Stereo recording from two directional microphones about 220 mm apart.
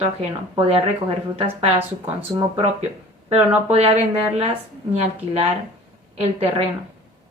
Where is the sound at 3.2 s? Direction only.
30° right (ahead or behind).